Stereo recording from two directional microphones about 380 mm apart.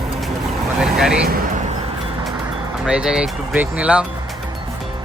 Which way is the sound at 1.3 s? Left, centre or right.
Right.